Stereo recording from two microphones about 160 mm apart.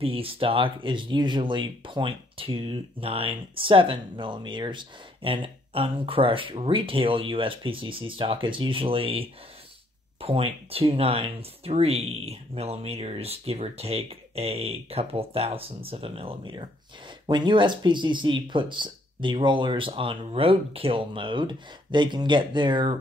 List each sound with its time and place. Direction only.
0.0 s speech: 35° right (ahead or behind)